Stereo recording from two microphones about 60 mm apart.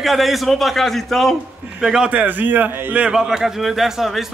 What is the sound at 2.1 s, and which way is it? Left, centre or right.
Speech, right.